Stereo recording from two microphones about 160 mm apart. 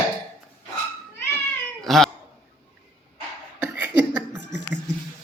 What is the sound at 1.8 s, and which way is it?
Speech, centre (ahead or behind).